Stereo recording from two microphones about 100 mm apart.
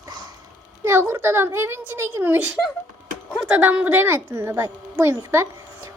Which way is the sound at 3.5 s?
15° right (ahead or behind).